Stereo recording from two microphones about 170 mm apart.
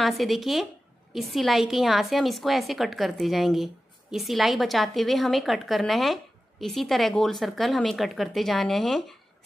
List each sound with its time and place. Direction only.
0.0 s a woman's voice: centre (ahead or behind)